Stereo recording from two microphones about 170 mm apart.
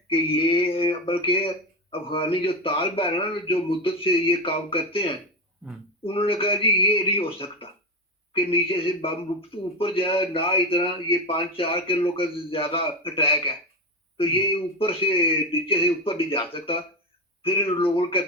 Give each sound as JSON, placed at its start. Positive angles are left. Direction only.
{"t": 0.1, "sound": "speech", "side_deg": 30}
{"t": 5.6, "sound": "speech", "side_deg": -5}
{"t": 6.0, "sound": "speech", "side_deg": 30}